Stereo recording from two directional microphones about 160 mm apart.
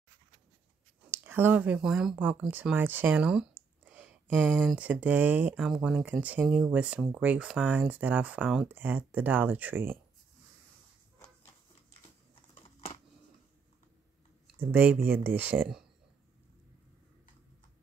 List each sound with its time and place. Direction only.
1.1 s speech: 15° right (ahead or behind)
12.6 s computer keyboard: 40° left (ahead or behind)
14.6 s speech: 10° right (ahead or behind)